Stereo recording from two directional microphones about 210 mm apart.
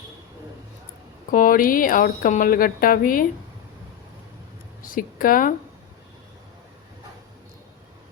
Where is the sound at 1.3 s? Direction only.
40° left (ahead or behind).